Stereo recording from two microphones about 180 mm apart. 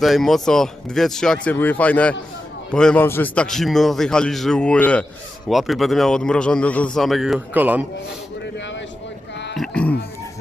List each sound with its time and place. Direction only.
0.0 s a man's voice: centre (ahead or behind)
8.5 s vehicle: 90° left
9.6 s a sound: 5° left (ahead or behind)